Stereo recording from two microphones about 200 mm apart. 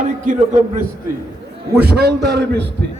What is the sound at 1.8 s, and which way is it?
Speech, 55° right (ahead or behind).